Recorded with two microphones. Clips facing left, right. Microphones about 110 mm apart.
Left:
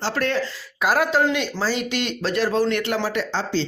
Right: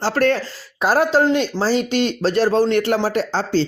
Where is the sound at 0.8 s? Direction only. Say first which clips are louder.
Right 4 dB; 35° right (ahead or behind).